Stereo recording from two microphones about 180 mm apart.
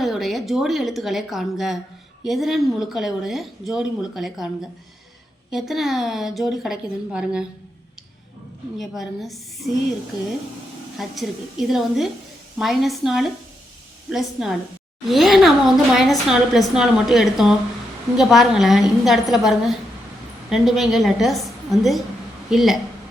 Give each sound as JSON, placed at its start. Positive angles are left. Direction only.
{"t": 0.0, "sound": "a woman's voice", "side_deg": 0}
{"t": 8.8, "sound": "a woman's voice", "side_deg": 0}
{"t": 10.9, "sound": "a woman's voice", "side_deg": 0}